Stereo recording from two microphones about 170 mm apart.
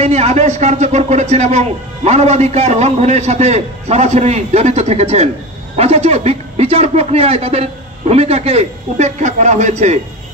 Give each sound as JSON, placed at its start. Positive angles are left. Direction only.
{"t": 0.0, "sound": "speech", "side_deg": -40}